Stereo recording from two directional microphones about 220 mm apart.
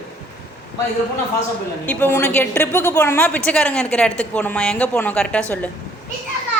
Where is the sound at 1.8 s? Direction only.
10° left (ahead or behind).